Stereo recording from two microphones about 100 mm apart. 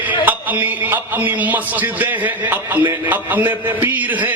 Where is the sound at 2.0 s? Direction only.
20° right (ahead or behind).